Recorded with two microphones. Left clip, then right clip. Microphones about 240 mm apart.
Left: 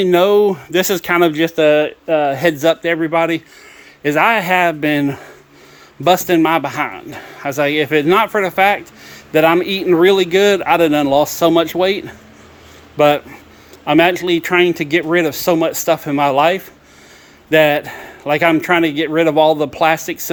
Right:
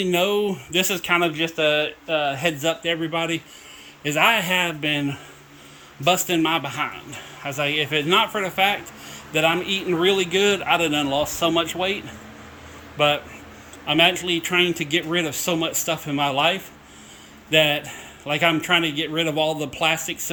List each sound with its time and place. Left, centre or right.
0.0 s speech: centre
6.1 s speech: centre
13.8 s speech: centre
17.5 s speech: centre